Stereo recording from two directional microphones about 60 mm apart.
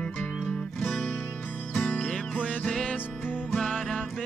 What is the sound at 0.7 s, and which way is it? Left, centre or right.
Music, centre.